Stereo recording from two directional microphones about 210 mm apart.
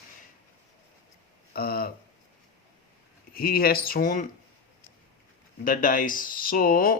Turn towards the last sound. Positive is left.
turn(degrees=45)  # may be behind; listen again after turning